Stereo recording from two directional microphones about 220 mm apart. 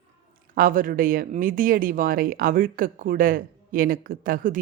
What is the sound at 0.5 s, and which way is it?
Speech, 40° right (ahead or behind).